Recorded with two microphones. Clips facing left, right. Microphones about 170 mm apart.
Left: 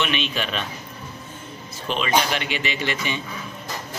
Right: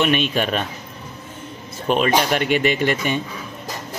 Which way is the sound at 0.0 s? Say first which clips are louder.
Right 6 dB; 45° right (ahead or behind).